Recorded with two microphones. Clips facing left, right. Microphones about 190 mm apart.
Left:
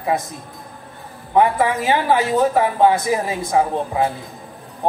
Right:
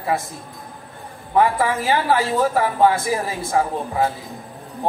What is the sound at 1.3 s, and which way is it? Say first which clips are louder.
Speech: left 2 dB; 20° left (ahead or behind).